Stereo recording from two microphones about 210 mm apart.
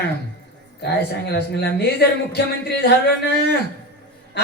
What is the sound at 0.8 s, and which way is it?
Speech, 50° left (ahead or behind).